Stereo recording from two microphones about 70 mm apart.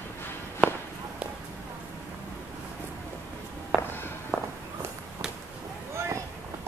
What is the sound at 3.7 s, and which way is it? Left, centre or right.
Walk, centre.